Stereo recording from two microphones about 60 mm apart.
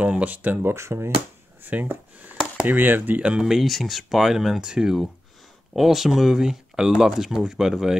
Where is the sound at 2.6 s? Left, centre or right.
Right.